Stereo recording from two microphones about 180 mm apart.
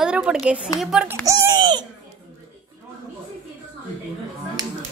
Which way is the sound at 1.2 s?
20° right (ahead or behind).